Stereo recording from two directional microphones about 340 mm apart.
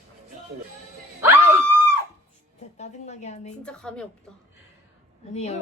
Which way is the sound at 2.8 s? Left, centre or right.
Centre.